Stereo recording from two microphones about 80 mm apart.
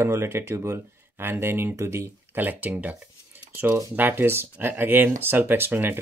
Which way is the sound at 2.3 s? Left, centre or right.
Right.